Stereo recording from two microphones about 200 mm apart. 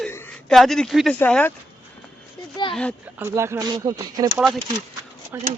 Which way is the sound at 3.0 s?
10° right (ahead or behind).